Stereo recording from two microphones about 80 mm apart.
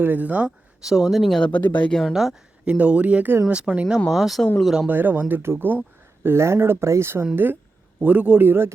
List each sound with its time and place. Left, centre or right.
0.0 s a man's voice: right
0.9 s speech: centre
1.5 s speech: left
1.9 s speech: centre
2.1 s speech: centre
2.7 s speech: centre
4.1 s speech: centre
4.9 s a man's voice: right